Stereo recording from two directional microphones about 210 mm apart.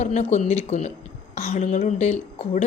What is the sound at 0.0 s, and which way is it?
A woman's voice, 35° left (ahead or behind).